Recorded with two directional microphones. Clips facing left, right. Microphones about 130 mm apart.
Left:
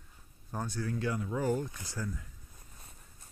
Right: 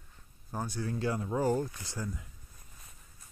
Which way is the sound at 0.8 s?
30° right (ahead or behind).